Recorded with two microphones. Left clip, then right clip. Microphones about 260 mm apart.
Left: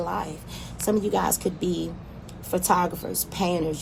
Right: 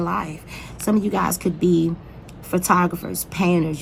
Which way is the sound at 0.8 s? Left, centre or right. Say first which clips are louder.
Right 2 dB; right.